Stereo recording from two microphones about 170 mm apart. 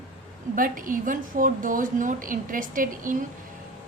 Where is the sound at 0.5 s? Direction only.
55° right (ahead or behind).